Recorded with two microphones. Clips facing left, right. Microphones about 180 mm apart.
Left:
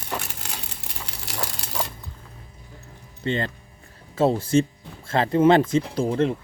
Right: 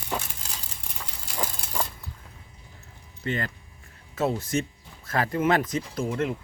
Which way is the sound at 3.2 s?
25° left (ahead or behind).